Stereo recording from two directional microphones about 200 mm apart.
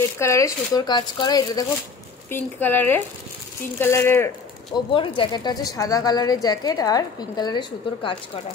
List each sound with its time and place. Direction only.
0.2 s speech: 15° left (ahead or behind)
4.9 s speech: 25° left (ahead or behind)